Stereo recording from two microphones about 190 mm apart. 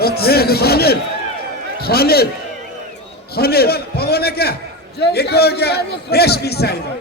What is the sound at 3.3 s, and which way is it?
A man's voice, 55° left (ahead or behind).